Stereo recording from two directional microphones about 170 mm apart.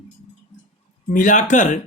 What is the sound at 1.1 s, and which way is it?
Speech, 50° left (ahead or behind).